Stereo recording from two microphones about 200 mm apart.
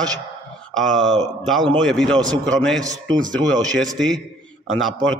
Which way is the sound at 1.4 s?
Centre (ahead or behind).